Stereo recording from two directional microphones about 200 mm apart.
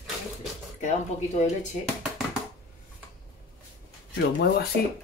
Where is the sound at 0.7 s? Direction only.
35° left (ahead or behind).